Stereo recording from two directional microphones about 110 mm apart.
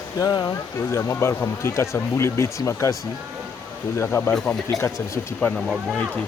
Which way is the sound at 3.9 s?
20° left (ahead or behind).